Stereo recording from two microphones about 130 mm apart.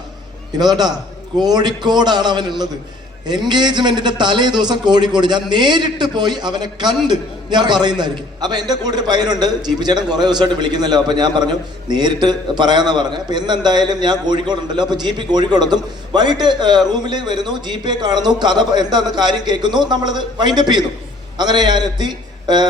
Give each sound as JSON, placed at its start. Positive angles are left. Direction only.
{"t": 0.6, "sound": "a man's voice", "side_deg": -30}